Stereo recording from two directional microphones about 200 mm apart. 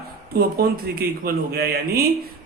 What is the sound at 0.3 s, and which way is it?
A man's voice, 50° right (ahead or behind).